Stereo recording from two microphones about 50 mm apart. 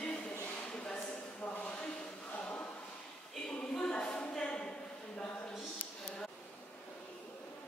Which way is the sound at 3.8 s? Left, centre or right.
Left.